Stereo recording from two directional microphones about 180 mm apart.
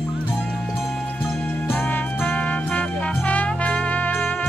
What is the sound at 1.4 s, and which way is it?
Jingle bell, 10° left (ahead or behind).